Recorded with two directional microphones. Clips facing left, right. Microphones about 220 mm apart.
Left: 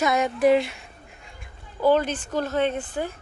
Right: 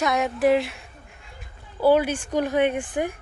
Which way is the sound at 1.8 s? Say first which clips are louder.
Right 2 dB; 10° right (ahead or behind).